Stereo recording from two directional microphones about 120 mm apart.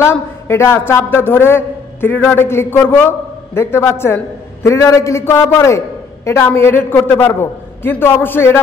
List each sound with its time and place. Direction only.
0.0 s a man's voice: 20° left (ahead or behind)